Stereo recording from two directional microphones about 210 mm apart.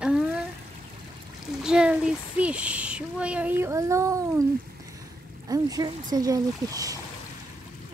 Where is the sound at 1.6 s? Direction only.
5° right (ahead or behind).